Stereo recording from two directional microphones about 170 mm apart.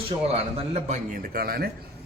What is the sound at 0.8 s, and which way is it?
Speech, 45° right (ahead or behind).